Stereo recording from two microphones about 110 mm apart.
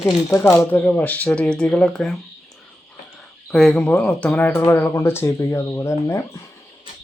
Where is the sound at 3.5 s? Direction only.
10° left (ahead or behind); by 6.4 s 25° left (ahead or behind).